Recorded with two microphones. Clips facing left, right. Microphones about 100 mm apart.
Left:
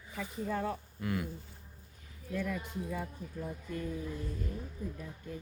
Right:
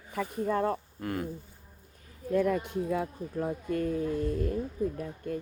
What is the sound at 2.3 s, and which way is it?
Speech, 50° right (ahead or behind).